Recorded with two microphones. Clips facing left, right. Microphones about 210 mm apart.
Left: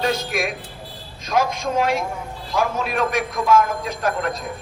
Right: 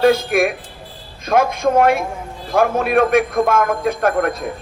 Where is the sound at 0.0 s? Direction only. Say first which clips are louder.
Right 9 dB; 55° right (ahead or behind).